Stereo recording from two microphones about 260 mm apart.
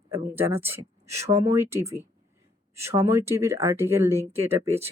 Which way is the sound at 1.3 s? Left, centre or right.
Right.